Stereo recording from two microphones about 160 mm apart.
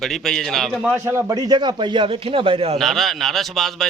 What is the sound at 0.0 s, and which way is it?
Speech, centre (ahead or behind).